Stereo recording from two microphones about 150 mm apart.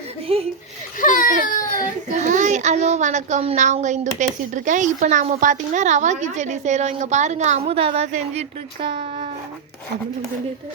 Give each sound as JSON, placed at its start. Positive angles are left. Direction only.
{"t": 0.9, "sound": "baby cry", "side_deg": 60}
{"t": 2.0, "sound": "speech", "side_deg": -55}
{"t": 8.8, "sound": "speech", "side_deg": -35}